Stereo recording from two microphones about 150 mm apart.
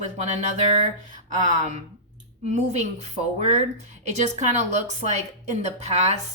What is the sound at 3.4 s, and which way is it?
Speech, 50° right (ahead or behind).